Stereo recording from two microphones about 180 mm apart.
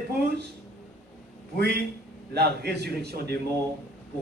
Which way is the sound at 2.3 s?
65° right (ahead or behind).